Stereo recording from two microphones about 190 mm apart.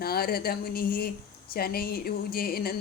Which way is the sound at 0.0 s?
55° left (ahead or behind).